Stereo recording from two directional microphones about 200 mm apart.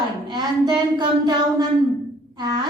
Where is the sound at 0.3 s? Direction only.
20° right (ahead or behind).